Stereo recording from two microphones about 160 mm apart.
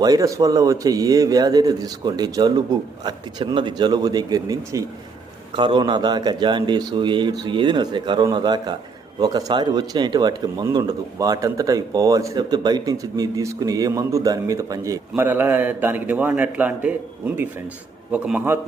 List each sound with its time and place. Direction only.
0.0 s speech: 25° right (ahead or behind)